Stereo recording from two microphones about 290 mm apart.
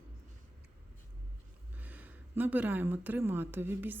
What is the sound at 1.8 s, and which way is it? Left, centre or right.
Speech, centre.